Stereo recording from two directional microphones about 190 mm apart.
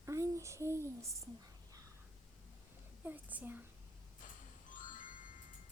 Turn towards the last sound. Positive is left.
turn(degrees=45)  # may be behind; listen again after turning